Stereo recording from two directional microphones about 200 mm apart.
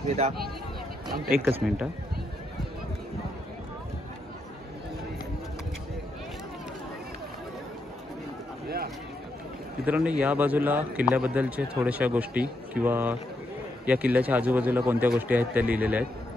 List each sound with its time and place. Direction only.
0.0 s speech: 35° right (ahead or behind)
1.1 s speech: 50° right (ahead or behind)
8.6 s a sound: 50° right (ahead or behind)
9.8 s a man's voice: 5° right (ahead or behind)